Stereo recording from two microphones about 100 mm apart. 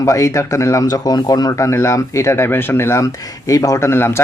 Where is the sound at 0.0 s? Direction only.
30° left (ahead or behind).